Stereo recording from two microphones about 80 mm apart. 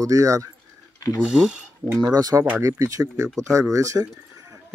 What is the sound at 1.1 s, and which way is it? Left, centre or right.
Speech, centre.